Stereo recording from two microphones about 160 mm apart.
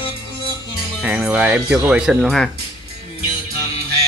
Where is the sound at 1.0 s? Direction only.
5° right (ahead or behind).